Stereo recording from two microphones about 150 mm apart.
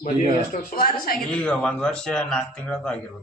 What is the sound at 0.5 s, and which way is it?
Speech, 80° left.